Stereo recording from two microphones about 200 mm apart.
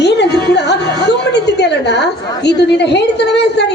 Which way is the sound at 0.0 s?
55° left (ahead or behind).